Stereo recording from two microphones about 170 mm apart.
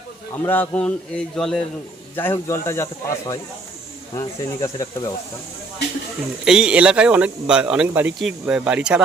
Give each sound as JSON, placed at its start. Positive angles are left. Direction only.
{"t": 0.4, "sound": "a man's voice", "side_deg": 10}
{"t": 2.1, "sound": "a man's voice", "side_deg": 15}
{"t": 6.4, "sound": "speech", "side_deg": -5}